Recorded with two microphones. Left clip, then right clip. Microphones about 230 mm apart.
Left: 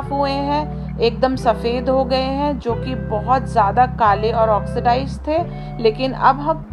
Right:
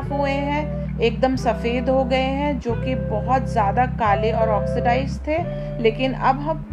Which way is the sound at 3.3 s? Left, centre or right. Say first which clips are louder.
Left 4 dB; centre.